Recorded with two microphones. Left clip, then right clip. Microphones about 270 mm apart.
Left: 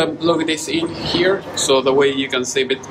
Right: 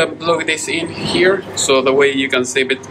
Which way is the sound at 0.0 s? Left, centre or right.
Centre.